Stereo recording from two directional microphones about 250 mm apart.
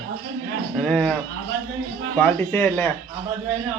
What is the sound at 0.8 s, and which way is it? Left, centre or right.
Speech, centre.